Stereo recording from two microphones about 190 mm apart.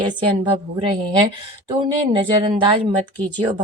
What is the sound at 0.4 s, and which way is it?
Speech, 25° right (ahead or behind).